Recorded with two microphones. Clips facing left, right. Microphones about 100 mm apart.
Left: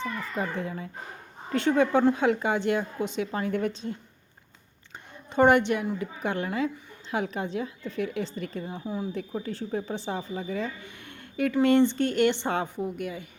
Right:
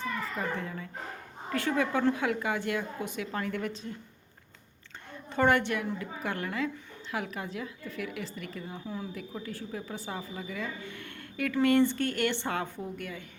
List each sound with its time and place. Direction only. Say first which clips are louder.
0.0 s a sound: left 2 dB; 20° left (ahead or behind)
1.5 s a woman's voice: left 6 dB; 25° left (ahead or behind)
5.3 s a woman's voice: left 5 dB; 20° left (ahead or behind)
10.8 s a woman's voice: right 2 dB; 20° left (ahead or behind)